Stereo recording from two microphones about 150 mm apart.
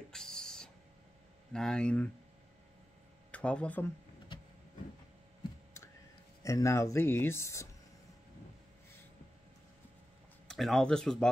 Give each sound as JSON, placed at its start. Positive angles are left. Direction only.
{"t": 0.1, "sound": "a sound", "side_deg": 5}
{"t": 1.5, "sound": "speech", "side_deg": 5}
{"t": 3.3, "sound": "speech", "side_deg": 10}
{"t": 6.4, "sound": "speech", "side_deg": 20}
{"t": 10.5, "sound": "speech", "side_deg": 5}